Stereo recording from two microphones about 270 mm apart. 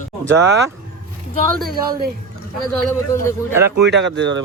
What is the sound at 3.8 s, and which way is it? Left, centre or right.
Speech, right.